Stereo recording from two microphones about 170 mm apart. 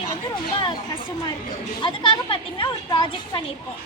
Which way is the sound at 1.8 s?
30° left (ahead or behind).